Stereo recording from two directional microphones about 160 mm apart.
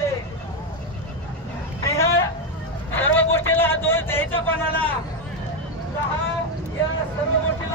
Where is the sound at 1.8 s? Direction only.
15° left (ahead or behind).